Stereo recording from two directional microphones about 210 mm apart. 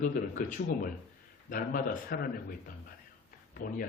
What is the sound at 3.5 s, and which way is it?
Speech, 45° left (ahead or behind).